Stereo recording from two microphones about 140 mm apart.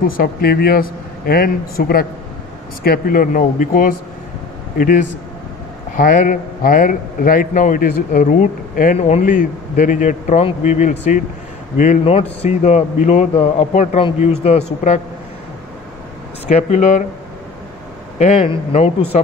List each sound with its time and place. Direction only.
0.0 s a man's voice: 90° left; by 8.9 s 75° left (ahead or behind)
8.9 s a man's voice: 50° left (ahead or behind)
9.2 s a man's voice: 70° left (ahead or behind)
12.0 s a man's voice: 45° left (ahead or behind)
16.4 s a man's voice: 55° left (ahead or behind)
18.2 s a man's voice: 45° left (ahead or behind)
19.1 s a man's voice: 60° left (ahead or behind)